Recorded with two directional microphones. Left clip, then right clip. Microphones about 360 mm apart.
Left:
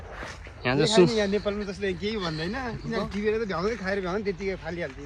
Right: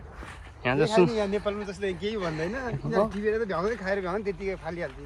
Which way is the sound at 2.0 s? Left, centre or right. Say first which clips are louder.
Even; centre.